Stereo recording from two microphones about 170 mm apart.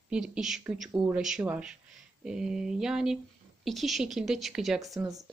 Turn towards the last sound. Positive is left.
turn(degrees=-20)  # may be behind; listen again after turning